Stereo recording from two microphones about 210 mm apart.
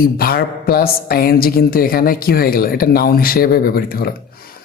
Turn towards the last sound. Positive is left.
turn(degrees=45)  # may be behind; listen again after turning